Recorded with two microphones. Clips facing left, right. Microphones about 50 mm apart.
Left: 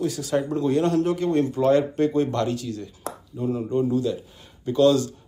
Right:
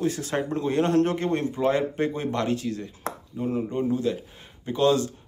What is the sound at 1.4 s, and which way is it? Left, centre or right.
A man's voice, right.